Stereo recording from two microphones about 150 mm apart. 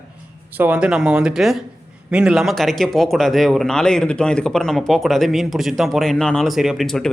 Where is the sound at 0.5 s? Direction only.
10° right (ahead or behind).